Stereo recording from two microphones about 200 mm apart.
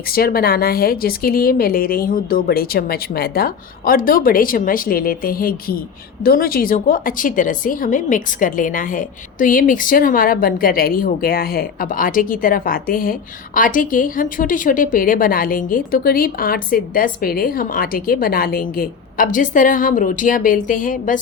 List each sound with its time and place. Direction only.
0.1 s a woman's voice: 50° left (ahead or behind)